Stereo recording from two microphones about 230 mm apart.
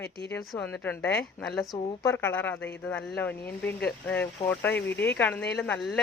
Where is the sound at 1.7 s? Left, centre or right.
Centre.